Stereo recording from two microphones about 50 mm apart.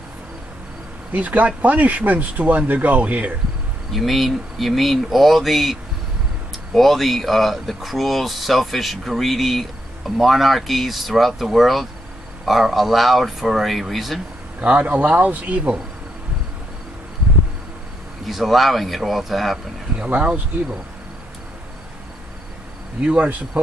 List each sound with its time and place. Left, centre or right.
1.1 s speech: right
3.9 s speech: centre
14.6 s speech: right
18.2 s speech: centre
20.1 s speech: right
22.9 s speech: right